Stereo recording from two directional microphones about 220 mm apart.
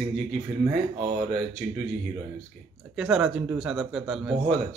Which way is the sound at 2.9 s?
5° right (ahead or behind).